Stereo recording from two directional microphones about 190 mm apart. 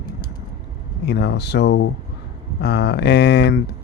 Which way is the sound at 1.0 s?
60° left (ahead or behind).